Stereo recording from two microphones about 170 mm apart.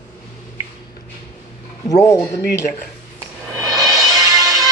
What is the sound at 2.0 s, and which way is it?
Speech, 20° left (ahead or behind).